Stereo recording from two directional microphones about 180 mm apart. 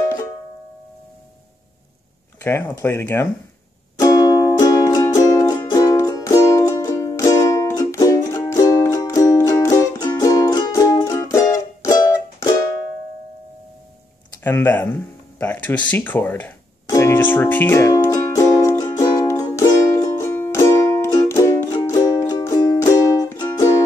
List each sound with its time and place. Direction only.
2.4 s speech: 15° left (ahead or behind)
4.0 s music: 20° left (ahead or behind)
14.4 s speech: 10° left (ahead or behind)
15.9 s music: 10° left (ahead or behind)